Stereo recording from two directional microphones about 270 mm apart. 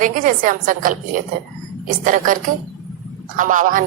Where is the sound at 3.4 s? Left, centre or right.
Right.